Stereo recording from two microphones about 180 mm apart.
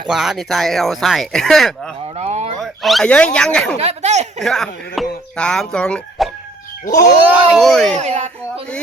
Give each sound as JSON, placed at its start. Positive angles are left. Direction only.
{"t": 0.1, "sound": "speech", "side_deg": 0}
{"t": 2.1, "sound": "a sound", "side_deg": -35}
{"t": 2.6, "sound": "speech", "side_deg": 0}
{"t": 3.8, "sound": "speech", "side_deg": -40}
{"t": 4.4, "sound": "speech", "side_deg": 0}
{"t": 7.9, "sound": "a sound", "side_deg": -40}